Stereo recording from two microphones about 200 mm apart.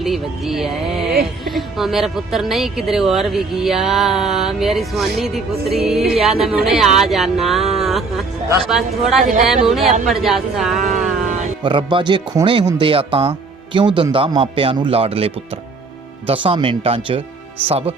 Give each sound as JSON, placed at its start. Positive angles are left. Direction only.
{"t": 0.0, "sound": "a woman's voice", "side_deg": 0}
{"t": 11.6, "sound": "speech", "side_deg": -25}